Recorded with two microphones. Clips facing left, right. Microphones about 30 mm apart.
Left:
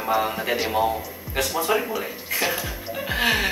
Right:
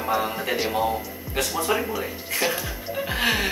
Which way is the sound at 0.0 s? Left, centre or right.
Centre.